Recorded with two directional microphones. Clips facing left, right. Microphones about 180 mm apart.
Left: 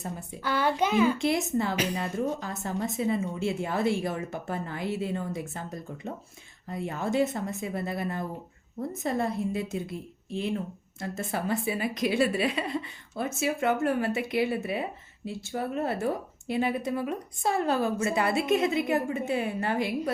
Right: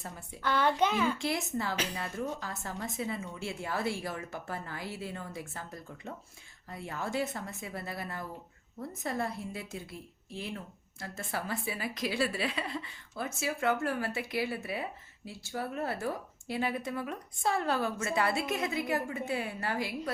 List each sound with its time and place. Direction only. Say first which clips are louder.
0.4 s a child's voice: left 1 dB; 10° left (ahead or behind)
1.2 s a woman's voice: left 7 dB; 20° left (ahead or behind)